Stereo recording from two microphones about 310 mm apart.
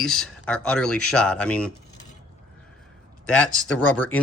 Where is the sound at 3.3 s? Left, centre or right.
Centre.